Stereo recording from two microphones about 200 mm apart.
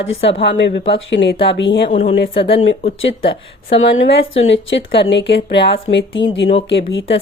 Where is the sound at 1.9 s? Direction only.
30° left (ahead or behind).